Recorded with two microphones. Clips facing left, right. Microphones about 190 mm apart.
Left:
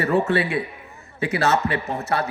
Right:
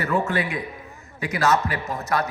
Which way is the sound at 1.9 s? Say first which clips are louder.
Left 1 dB; 35° left (ahead or behind).